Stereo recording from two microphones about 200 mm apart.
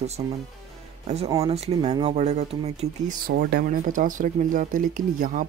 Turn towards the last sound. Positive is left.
turn(degrees=-40)  # may be behind; listen again after turning